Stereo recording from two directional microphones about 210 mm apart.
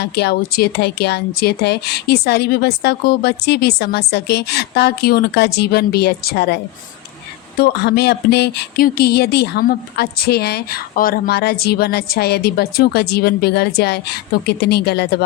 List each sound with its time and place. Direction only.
0.0 s speech: 50° left (ahead or behind)
7.6 s speech: 50° left (ahead or behind)